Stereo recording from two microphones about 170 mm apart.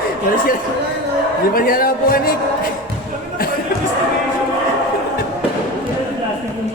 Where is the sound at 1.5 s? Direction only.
55° left (ahead or behind).